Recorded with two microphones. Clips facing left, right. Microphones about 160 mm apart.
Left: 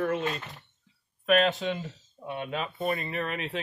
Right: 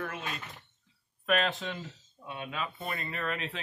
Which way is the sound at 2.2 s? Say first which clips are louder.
Left 5 dB; 25° left (ahead or behind).